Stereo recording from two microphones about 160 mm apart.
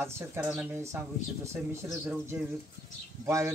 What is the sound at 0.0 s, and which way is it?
Speech, 15° right (ahead or behind).